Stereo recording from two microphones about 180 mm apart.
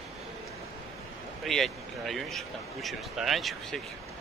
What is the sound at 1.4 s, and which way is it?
Speech, centre (ahead or behind).